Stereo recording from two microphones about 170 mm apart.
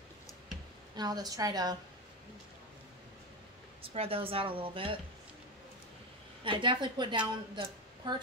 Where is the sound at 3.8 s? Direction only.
35° right (ahead or behind).